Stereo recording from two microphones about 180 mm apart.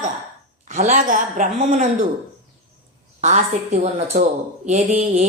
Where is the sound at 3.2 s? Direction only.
40° right (ahead or behind).